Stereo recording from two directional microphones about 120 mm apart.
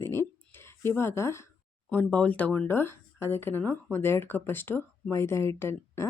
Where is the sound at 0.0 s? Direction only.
20° left (ahead or behind).